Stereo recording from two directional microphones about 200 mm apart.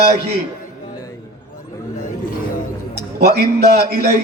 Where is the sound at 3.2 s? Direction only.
55° right (ahead or behind).